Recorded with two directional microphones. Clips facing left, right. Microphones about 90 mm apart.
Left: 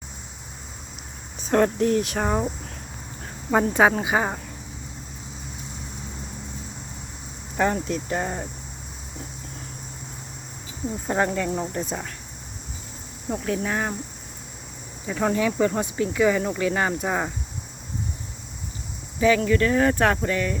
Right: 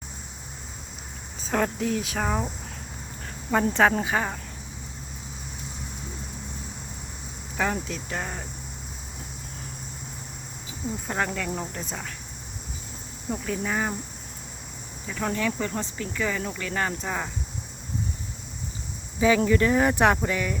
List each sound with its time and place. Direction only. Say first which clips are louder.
1.5 s speech: left 6 dB; centre (ahead or behind)
3.5 s speech: left 2 dB; 5° left (ahead or behind)
7.5 s speech: left 5 dB; centre (ahead or behind)
11.1 s speech: left 6 dB; 5° left (ahead or behind)
13.3 s speech: left 3 dB; 5° left (ahead or behind)
15.0 s speech: left 5 dB; 15° left (ahead or behind)
19.4 s speech: left 1 dB; 20° right (ahead or behind)